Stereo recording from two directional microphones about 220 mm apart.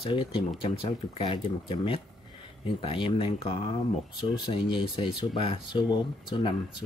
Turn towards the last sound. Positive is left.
turn(degrees=20)  # may be behind; listen again after turning